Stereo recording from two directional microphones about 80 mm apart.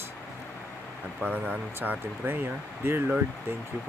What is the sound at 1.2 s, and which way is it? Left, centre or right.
Speech, centre.